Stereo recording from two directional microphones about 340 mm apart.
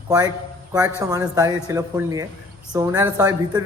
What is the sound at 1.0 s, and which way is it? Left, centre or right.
A man's voice, centre.